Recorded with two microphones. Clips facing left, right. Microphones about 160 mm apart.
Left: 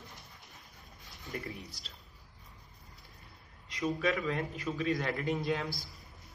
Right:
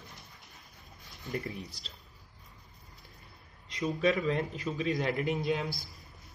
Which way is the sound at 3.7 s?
25° right (ahead or behind).